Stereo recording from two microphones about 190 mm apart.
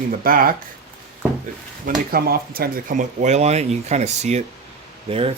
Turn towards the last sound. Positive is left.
turn(degrees=-30)  # may be behind; listen again after turning